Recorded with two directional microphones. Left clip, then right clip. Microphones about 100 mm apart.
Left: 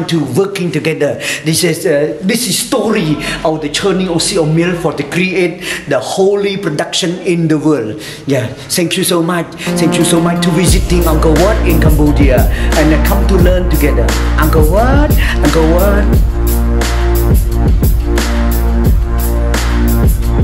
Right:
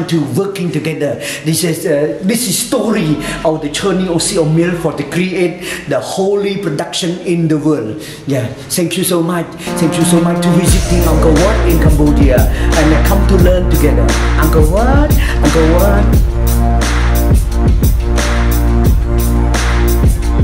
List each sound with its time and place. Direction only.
0.1 s a man's voice: 20° left (ahead or behind); by 15.9 s centre (ahead or behind)